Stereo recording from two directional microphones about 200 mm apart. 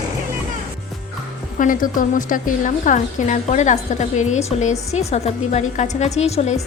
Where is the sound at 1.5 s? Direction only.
40° left (ahead or behind).